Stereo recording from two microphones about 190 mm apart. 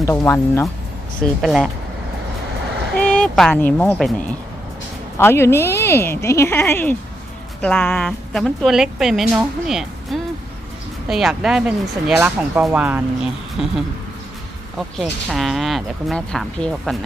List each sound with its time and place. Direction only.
0.0 s speech: 15° left (ahead or behind)
1.2 s a woman's voice: centre (ahead or behind)
3.0 s a woman's voice: 5° left (ahead or behind)
14.8 s a woman's voice: centre (ahead or behind)